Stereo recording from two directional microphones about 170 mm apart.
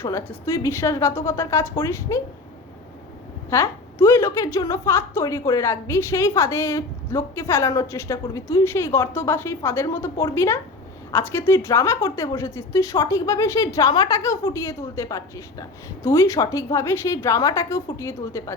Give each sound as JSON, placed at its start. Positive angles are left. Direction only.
{"t": 0.0, "sound": "a woman's voice", "side_deg": 15}
{"t": 3.5, "sound": "a woman's voice", "side_deg": 15}